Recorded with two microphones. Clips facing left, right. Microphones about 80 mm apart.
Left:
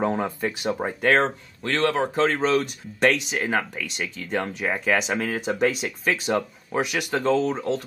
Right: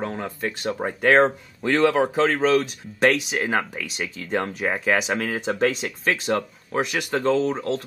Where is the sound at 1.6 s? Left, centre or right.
Centre.